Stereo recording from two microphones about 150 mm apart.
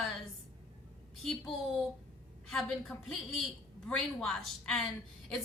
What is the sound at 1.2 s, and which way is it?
Speech, centre (ahead or behind).